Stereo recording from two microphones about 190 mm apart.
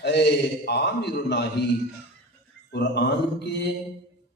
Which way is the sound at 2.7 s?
65° left (ahead or behind).